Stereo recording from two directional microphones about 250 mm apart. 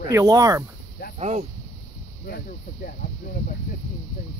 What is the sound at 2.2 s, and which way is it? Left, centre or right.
Speech, left.